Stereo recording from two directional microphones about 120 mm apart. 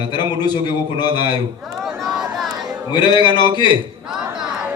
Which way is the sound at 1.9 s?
Centre (ahead or behind).